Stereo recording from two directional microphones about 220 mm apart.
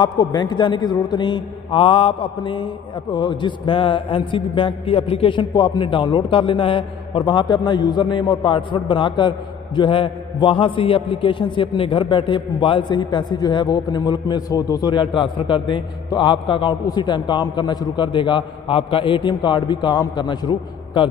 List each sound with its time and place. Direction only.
0.0 s a man's voice: 20° left (ahead or behind)